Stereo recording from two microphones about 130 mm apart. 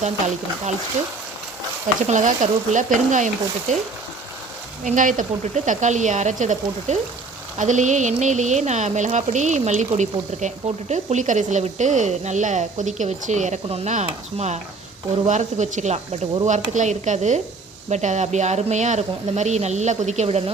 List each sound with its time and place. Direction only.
2.0 s speech: 75° right (ahead or behind)
4.8 s speech: 80° right; by 20.4 s 60° right (ahead or behind)